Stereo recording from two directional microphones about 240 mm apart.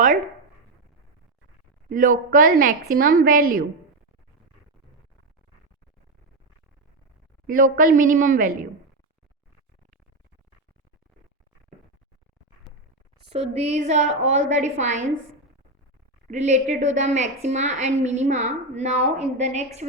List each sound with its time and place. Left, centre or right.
1.9 s a woman's voice: right
7.4 s a woman's voice: right
13.2 s a woman's voice: right
16.3 s a woman's voice: right